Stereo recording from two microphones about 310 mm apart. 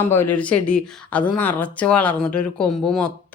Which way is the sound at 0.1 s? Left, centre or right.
Centre.